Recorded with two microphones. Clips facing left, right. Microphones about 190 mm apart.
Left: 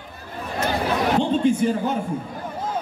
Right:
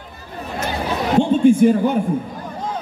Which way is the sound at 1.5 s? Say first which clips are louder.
Right 7 dB; 55° right (ahead or behind).